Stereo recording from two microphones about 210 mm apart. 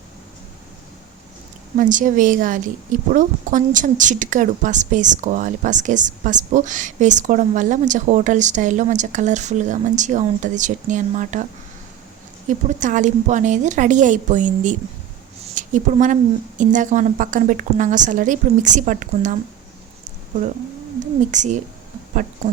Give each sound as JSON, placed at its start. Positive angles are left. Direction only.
{"t": 1.8, "sound": "a woman's voice", "side_deg": -40}
{"t": 12.5, "sound": "a woman's voice", "side_deg": -35}
{"t": 21.2, "sound": "a woman's voice", "side_deg": -35}